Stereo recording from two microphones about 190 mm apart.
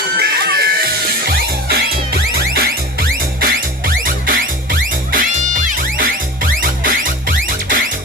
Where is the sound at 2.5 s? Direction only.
50° right (ahead or behind).